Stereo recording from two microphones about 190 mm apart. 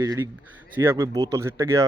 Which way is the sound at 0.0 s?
15° right (ahead or behind).